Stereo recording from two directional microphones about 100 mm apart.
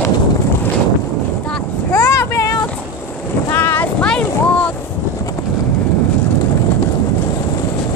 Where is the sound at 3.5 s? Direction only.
20° left (ahead or behind).